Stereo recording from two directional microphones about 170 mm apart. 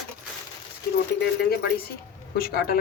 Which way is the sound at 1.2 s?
65° left (ahead or behind).